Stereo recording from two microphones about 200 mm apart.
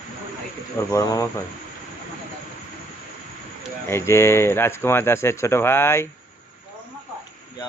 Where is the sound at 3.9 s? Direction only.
10° left (ahead or behind).